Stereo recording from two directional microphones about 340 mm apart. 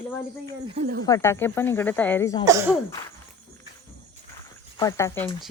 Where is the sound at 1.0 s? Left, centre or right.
Centre.